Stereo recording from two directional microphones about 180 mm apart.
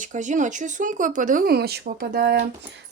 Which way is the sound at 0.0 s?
45° right (ahead or behind).